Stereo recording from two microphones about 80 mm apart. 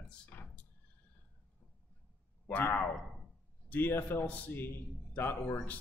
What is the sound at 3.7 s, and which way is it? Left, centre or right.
A man's voice, left.